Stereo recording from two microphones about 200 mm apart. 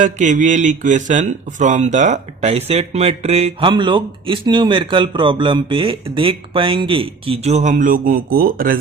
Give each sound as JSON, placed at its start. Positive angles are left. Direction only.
{"t": 0.0, "sound": "speech", "side_deg": -40}